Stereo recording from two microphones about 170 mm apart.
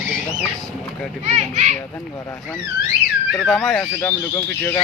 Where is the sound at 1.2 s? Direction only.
40° right (ahead or behind).